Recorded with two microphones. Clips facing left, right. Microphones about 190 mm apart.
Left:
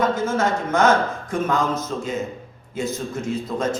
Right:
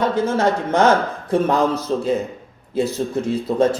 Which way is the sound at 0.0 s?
35° right (ahead or behind).